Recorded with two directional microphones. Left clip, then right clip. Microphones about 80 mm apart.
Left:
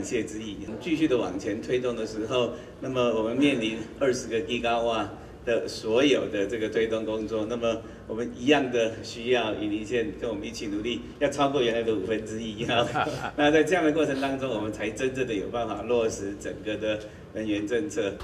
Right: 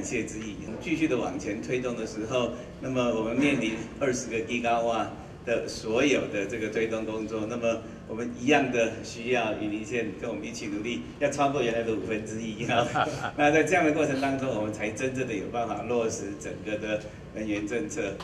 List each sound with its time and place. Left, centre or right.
0.8 s a man's voice: centre
12.9 s a man's voice: right
13.4 s a man's voice: centre